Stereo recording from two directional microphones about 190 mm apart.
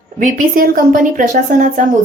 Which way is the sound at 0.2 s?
45° right (ahead or behind).